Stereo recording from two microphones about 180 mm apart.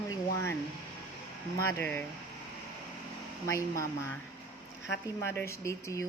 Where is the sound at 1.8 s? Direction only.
10° left (ahead or behind).